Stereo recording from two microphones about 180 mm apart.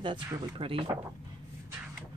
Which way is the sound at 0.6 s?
30° right (ahead or behind).